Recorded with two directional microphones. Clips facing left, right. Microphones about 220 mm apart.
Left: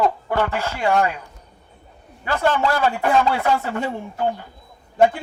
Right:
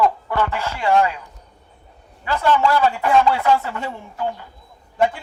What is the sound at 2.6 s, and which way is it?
A man's voice, 45° left (ahead or behind).